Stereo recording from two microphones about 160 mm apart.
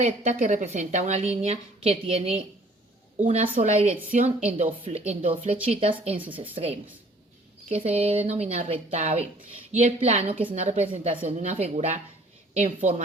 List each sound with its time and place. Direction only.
0.0 s a woman's voice: 50° right (ahead or behind)
3.6 s a woman's voice: 50° right (ahead or behind)
4.2 s a woman's voice: 45° right (ahead or behind)